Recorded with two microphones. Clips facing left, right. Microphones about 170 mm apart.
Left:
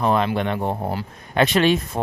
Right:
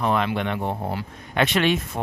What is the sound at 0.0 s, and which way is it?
Speech, 35° left (ahead or behind).